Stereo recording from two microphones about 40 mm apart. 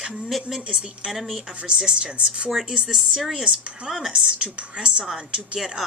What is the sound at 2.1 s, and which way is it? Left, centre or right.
Speech, right.